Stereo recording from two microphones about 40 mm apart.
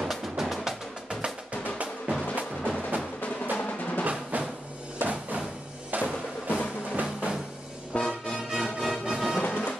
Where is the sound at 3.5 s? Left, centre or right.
Left.